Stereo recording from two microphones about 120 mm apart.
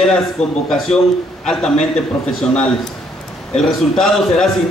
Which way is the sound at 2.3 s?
5° left (ahead or behind).